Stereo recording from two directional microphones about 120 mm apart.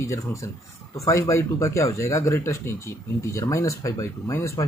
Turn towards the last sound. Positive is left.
turn(degrees=25)  # may be behind; listen again after turning